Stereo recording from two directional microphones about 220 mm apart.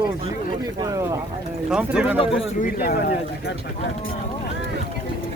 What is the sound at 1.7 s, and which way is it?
Speech, 5° right (ahead or behind).